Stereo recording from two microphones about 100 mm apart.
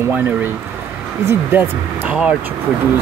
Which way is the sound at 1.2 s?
25° right (ahead or behind).